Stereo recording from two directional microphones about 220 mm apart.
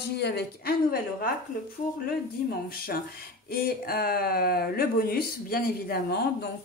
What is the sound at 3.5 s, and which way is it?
Speech, 45° left (ahead or behind).